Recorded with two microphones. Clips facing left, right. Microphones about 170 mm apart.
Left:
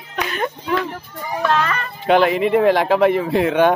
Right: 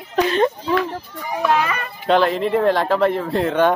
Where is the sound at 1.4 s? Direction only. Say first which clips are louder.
Even; 10° right (ahead or behind).